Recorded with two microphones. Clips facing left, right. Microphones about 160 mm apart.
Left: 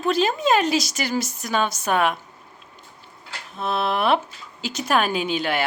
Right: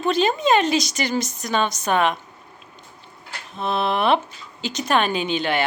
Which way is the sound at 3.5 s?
Centre (ahead or behind).